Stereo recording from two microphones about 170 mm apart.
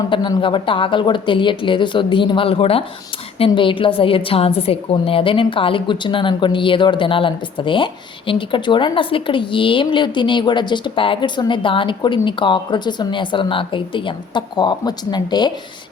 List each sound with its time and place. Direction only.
0.1 s a woman's voice: 30° left (ahead or behind)